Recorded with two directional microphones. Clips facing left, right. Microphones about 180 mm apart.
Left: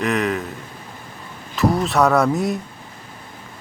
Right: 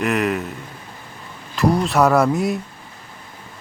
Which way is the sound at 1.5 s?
Centre (ahead or behind).